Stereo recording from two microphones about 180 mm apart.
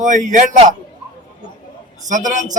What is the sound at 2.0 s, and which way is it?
Speech, 45° right (ahead or behind).